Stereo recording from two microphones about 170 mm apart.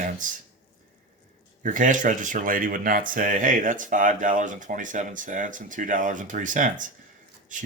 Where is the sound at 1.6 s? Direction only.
50° right (ahead or behind).